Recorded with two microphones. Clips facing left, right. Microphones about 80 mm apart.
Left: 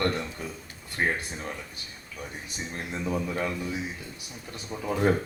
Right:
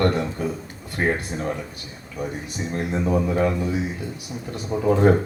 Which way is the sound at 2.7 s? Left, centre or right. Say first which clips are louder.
Right 8 dB; right.